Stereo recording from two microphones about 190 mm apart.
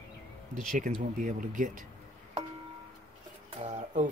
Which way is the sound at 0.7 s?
45° right (ahead or behind).